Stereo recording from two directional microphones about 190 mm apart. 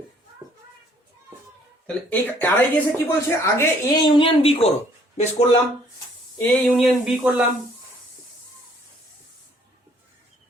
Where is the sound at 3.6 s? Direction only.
25° left (ahead or behind).